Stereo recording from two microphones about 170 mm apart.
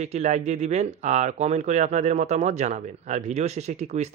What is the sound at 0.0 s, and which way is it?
Speech, 40° right (ahead or behind).